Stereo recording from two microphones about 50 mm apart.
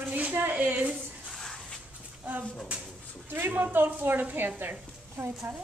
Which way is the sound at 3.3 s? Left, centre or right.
Right.